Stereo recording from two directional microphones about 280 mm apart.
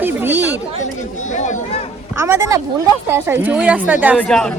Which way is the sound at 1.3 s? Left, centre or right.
Left.